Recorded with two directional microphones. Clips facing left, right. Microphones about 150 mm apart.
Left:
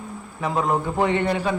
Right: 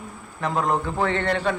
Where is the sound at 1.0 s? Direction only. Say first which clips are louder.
Left 3 dB; 15° left (ahead or behind).